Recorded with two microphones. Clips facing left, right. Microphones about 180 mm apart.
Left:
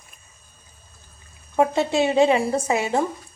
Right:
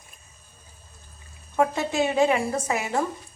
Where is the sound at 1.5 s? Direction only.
25° left (ahead or behind).